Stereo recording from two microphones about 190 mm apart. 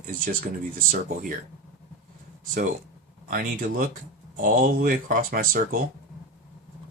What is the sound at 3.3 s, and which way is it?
Speech, 45° right (ahead or behind).